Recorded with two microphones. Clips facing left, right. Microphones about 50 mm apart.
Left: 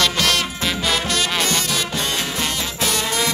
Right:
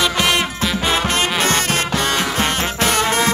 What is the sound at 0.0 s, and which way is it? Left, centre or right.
Music, right.